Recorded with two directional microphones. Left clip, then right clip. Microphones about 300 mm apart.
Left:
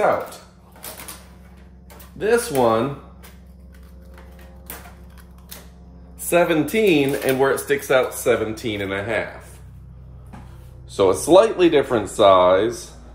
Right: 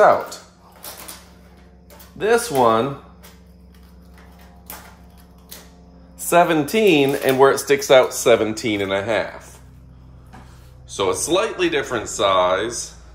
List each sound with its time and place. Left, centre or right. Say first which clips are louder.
2.1 s speech: right 2 dB; centre
6.2 s speech: right 2 dB; centre
11.0 s speech: left 6 dB; centre